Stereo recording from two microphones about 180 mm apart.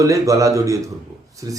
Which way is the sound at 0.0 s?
20° right (ahead or behind).